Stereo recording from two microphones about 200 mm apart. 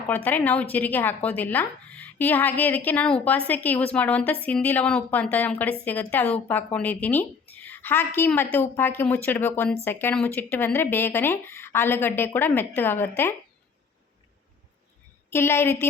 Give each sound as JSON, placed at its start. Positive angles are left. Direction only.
{"t": 0.3, "sound": "speech", "side_deg": 10}
{"t": 15.3, "sound": "speech", "side_deg": 10}